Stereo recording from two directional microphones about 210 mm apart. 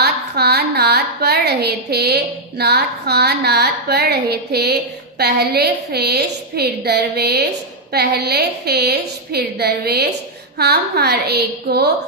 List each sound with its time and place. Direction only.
0.0 s a woman's voice: 50° right (ahead or behind)